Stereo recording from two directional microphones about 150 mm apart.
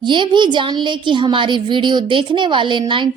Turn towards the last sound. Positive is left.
turn(degrees=-30)  # may be behind; listen again after turning